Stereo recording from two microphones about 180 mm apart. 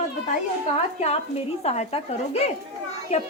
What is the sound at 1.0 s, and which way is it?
A woman's voice, 35° left (ahead or behind).